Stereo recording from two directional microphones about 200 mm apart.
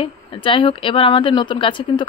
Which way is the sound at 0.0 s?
25° left (ahead or behind).